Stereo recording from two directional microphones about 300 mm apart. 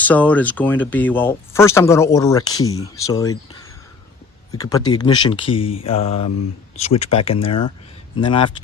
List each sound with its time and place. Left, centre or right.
0.0 s speech: centre
4.5 s speech: centre